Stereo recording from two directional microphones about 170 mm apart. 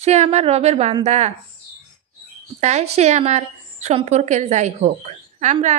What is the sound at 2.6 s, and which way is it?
A woman's voice, 40° right (ahead or behind).